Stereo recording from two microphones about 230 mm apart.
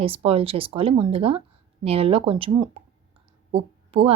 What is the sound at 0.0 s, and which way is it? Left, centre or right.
Speech, right.